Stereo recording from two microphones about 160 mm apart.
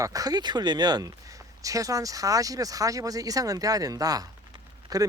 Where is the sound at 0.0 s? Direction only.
20° right (ahead or behind).